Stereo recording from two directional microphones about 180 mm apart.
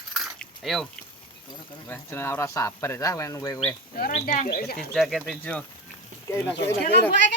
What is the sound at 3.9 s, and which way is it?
Speech, 55° left (ahead or behind).